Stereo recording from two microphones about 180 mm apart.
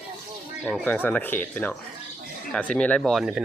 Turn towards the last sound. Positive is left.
turn(degrees=0)  # may be behind; listen again after turning